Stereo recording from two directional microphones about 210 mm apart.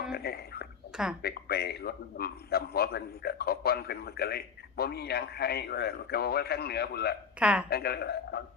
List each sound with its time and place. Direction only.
0.1 s a sound: 50° left (ahead or behind)
1.2 s a man's voice: 50° left (ahead or behind)
7.3 s a woman's voice: 5° right (ahead or behind)
7.7 s a man's voice: 50° left (ahead or behind)